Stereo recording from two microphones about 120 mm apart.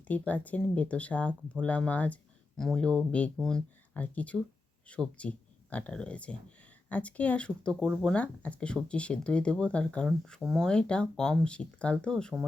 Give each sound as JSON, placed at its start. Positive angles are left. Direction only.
{"t": 0.1, "sound": "speech", "side_deg": 10}
{"t": 3.9, "sound": "speech", "side_deg": 15}